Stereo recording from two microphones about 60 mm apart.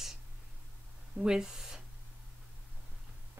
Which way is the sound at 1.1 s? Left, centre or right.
Centre.